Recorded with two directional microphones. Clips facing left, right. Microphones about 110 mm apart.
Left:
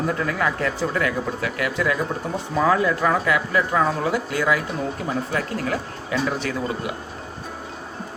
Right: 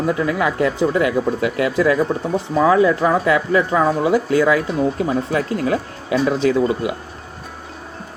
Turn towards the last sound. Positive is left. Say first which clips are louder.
# right 9 dB
turn(degrees=-25)  # may be behind; listen again after turning